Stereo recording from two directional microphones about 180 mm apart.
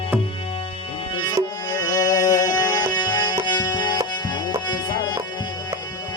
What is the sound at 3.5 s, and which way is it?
Tabla, 25° left (ahead or behind).